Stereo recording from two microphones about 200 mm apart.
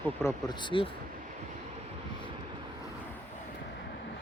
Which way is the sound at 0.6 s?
25° left (ahead or behind).